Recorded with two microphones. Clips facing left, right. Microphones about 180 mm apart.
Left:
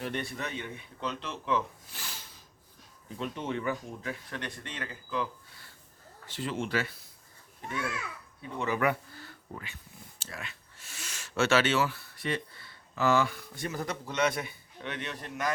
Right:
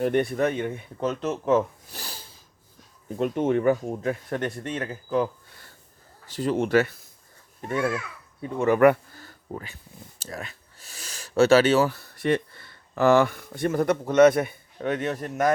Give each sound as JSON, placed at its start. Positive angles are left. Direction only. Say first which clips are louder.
{"t": 0.0, "sound": "speech", "louder": "right 13 dB", "side_deg": -55}
{"t": 3.1, "sound": "speech", "louder": "right 11 dB", "side_deg": -50}
{"t": 6.6, "sound": "speech", "louder": "right 12 dB", "side_deg": -55}
{"t": 9.2, "sound": "a sound", "louder": "right 7 dB", "side_deg": -40}
{"t": 10.2, "sound": "speech", "louder": "right 7 dB", "side_deg": -40}